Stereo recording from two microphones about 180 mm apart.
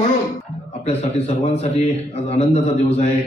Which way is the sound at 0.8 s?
35° left (ahead or behind).